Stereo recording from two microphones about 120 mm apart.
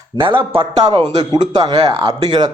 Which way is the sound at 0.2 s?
50° right (ahead or behind).